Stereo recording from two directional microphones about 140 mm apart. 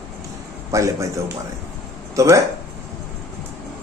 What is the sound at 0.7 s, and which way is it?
A man's voice, 20° right (ahead or behind).